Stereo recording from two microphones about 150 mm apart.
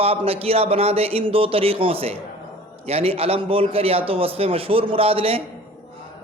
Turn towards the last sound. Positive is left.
turn(degrees=-40)  # may be behind; listen again after turning